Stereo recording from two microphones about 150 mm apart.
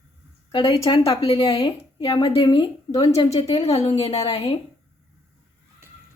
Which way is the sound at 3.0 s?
45° left (ahead or behind).